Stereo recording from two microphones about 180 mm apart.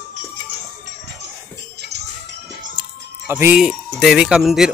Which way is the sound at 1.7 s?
65° right (ahead or behind).